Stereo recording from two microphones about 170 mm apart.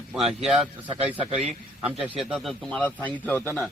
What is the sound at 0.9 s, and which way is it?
Speech, 35° right (ahead or behind).